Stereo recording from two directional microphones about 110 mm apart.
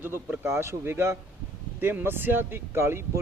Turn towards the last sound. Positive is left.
turn(degrees=-25)  # may be behind; listen again after turning